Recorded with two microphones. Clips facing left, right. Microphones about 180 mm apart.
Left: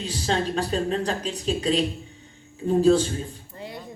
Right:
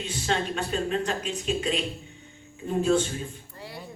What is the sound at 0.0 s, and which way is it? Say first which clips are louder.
Speech: left 3 dB; 35° left (ahead or behind).